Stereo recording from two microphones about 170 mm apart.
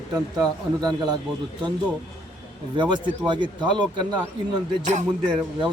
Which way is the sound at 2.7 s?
25° right (ahead or behind).